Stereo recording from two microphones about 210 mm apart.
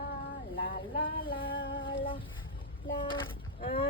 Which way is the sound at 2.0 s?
25° left (ahead or behind).